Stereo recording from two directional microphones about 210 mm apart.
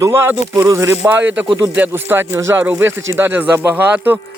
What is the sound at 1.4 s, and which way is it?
Speech, 25° right (ahead or behind).